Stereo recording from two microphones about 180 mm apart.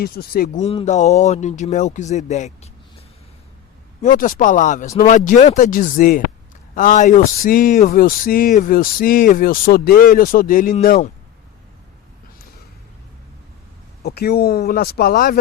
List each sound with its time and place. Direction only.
0.0 s speech: 55° left (ahead or behind)
0.6 s speech: 35° left (ahead or behind)
4.0 s speech: 50° left (ahead or behind)
14.0 s speech: 60° left (ahead or behind)